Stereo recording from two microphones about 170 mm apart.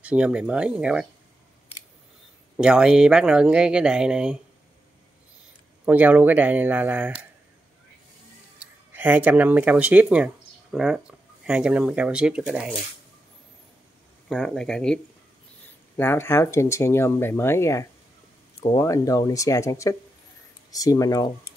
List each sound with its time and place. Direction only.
0.0 s speech: 5° right (ahead or behind)
2.5 s speech: 5° right (ahead or behind)
5.9 s speech: 10° right (ahead or behind)
8.5 s speech: 10° right (ahead or behind)
14.3 s speech: centre (ahead or behind)
16.0 s speech: 15° left (ahead or behind)